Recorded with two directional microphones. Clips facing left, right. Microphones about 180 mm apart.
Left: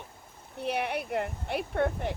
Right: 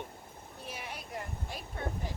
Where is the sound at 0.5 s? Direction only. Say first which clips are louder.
Left 14 dB; 65° left (ahead or behind).